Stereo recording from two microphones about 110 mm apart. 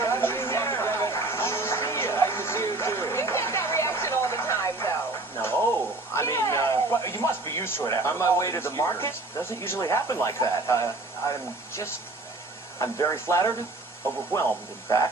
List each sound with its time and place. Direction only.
0.0 s music: 20° left (ahead or behind)
6.1 s speech: 25° left (ahead or behind)